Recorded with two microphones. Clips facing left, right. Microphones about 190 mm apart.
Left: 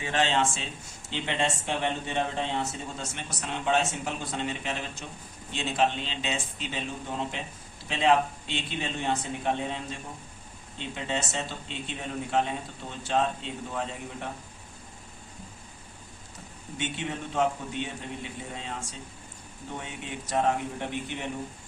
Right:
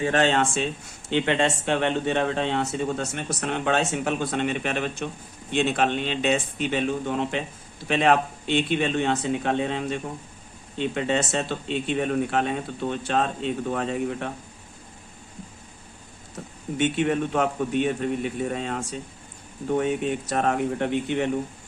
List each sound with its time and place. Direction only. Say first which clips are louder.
0.0 s speech: right 5 dB; 50° right (ahead or behind)
16.7 s speech: right 11 dB; 60° right (ahead or behind)
20.3 s speech: right 1 dB; 65° right (ahead or behind)